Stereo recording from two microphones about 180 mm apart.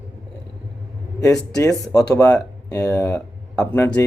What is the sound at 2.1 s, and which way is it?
Speech, 15° left (ahead or behind).